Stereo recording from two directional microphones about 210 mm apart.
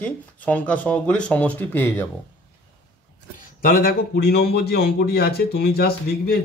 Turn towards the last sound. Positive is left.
turn(degrees=50)  # may be behind; listen again after turning